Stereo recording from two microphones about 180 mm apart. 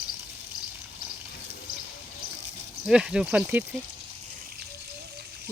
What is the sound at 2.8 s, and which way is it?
Speech, 5° right (ahead or behind).